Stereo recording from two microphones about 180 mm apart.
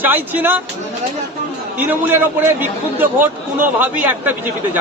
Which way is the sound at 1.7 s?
10° right (ahead or behind).